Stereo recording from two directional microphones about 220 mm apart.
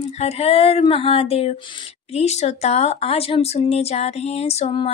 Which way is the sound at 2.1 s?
30° left (ahead or behind).